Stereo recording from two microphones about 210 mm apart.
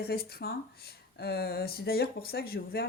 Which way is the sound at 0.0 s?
50° left (ahead or behind).